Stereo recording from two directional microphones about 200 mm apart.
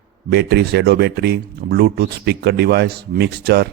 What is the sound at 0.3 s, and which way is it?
Speech, 55° right (ahead or behind).